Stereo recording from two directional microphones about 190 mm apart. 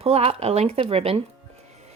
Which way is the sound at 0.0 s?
30° right (ahead or behind).